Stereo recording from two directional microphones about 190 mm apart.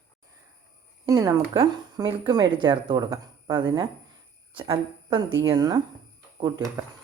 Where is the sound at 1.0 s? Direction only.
20° right (ahead or behind).